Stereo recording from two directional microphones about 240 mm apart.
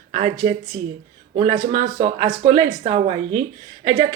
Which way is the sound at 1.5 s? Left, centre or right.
Right.